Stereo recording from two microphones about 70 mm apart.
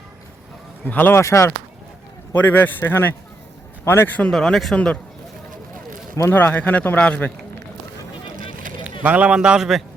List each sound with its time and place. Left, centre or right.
0.9 s speech: left
1.1 s speech: left
2.3 s a man's voice: left
4.4 s speech: centre
6.2 s speech: left
8.8 s a man's voice: centre